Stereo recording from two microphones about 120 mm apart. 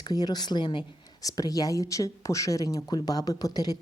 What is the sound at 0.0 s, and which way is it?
A woman's voice, 35° left (ahead or behind).